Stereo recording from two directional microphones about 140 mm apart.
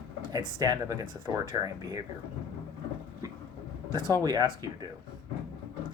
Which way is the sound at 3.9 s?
30° right (ahead or behind).